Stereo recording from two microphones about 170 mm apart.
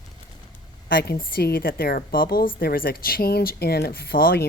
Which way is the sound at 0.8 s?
60° left (ahead or behind).